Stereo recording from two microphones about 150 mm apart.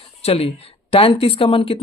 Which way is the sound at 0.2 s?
40° left (ahead or behind).